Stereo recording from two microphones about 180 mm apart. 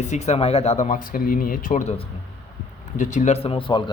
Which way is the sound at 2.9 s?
45° left (ahead or behind).